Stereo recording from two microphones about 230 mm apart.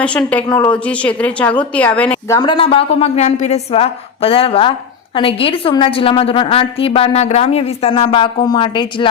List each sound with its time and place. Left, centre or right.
0.0 s a woman's voice: centre; by 9.0 s left